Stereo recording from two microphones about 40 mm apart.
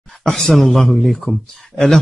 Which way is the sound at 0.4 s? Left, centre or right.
Centre.